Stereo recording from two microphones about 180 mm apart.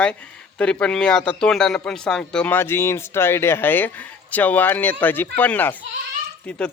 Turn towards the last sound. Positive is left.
turn(degrees=5)  # may be behind; listen again after turning